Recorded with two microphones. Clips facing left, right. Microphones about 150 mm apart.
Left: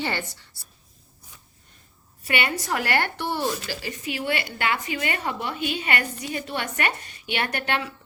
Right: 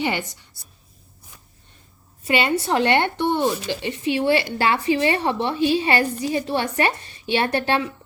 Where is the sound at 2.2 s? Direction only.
25° right (ahead or behind).